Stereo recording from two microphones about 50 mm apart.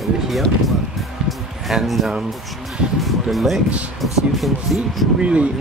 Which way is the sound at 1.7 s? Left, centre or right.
Centre.